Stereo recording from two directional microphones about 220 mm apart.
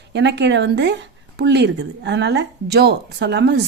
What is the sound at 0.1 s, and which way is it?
A woman's voice, 50° right (ahead or behind).